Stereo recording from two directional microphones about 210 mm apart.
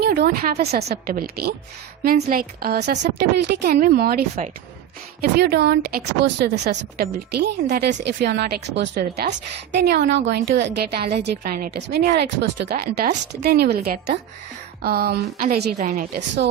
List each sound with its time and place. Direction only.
0.0 s a woman's voice: 45° right (ahead or behind)
5.4 s a woman's voice: 50° right (ahead or behind)